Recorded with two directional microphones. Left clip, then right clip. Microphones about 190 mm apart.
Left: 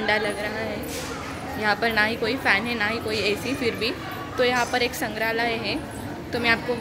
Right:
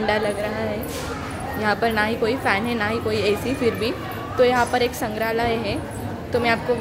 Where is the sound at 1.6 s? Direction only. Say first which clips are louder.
Right 1 dB; 5° right (ahead or behind).